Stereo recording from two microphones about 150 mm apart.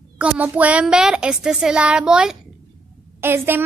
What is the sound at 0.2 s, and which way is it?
A woman's voice, 10° right (ahead or behind).